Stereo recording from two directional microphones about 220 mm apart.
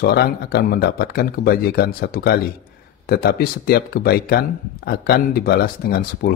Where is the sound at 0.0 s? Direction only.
45° left (ahead or behind).